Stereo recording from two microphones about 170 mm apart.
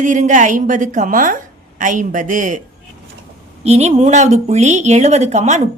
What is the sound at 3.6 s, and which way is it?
Speech, 40° right (ahead or behind).